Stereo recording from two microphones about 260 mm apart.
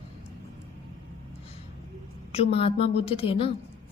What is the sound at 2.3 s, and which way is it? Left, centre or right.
A woman's voice, left.